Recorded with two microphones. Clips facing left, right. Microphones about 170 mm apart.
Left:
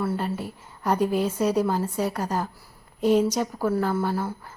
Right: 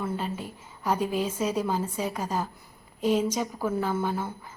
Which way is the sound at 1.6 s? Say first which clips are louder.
Left 4 dB; 10° right (ahead or behind).